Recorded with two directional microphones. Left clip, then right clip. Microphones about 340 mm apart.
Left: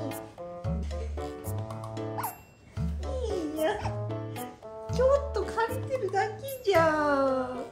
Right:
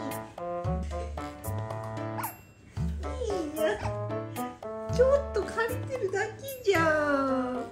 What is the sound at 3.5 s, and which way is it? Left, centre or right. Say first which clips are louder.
Music: even; centre.